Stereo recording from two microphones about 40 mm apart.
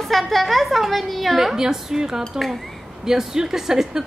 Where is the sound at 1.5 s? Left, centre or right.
Centre.